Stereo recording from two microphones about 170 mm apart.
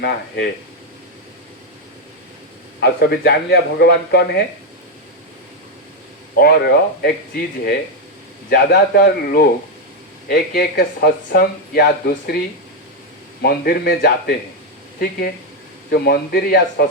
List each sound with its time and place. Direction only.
2.8 s speech: 70° left (ahead or behind)
6.3 s speech: 65° left (ahead or behind)
13.4 s speech: 65° left (ahead or behind)
15.9 s speech: 65° left (ahead or behind)